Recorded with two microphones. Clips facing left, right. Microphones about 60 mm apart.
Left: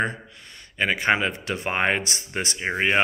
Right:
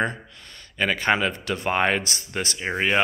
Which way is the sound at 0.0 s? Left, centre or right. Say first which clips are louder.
Even; centre.